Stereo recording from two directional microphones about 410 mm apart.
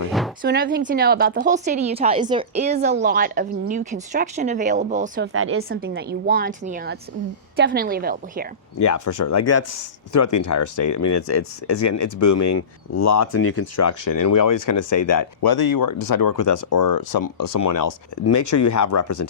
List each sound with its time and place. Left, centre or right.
0.4 s a woman's voice: right
8.8 s speech: left